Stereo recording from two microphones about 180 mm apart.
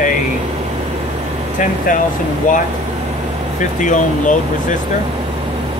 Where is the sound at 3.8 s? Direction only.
45° left (ahead or behind).